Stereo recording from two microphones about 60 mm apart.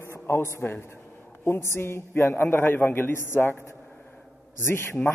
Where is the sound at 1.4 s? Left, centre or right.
Left.